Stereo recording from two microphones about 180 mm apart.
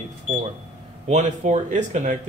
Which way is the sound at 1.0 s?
40° right (ahead or behind).